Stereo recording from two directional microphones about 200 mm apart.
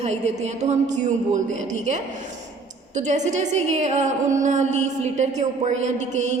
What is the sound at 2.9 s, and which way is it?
A woman's voice, 35° right (ahead or behind).